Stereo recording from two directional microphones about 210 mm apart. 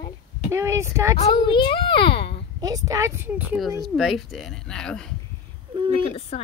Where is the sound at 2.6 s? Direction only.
15° right (ahead or behind); by 5.2 s 5° left (ahead or behind).